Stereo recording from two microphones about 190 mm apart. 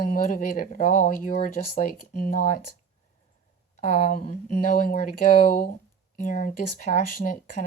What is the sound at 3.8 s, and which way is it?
Speech, 40° left (ahead or behind).